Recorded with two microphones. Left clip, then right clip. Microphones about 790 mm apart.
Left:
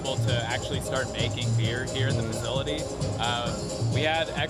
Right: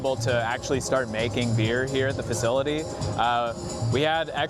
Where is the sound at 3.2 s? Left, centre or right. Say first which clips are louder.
Right 6 dB; right.